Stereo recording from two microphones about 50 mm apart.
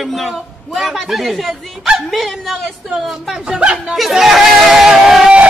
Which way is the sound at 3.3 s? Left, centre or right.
Centre.